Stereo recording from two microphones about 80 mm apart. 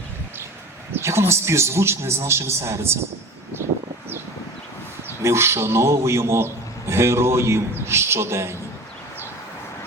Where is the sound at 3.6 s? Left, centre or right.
Right.